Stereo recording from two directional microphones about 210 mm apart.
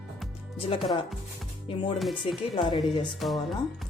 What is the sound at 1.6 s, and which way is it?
A woman's voice, 25° left (ahead or behind).